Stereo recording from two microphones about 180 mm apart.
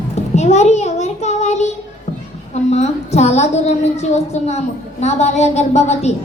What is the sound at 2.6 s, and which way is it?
A woman's voice, 40° left (ahead or behind).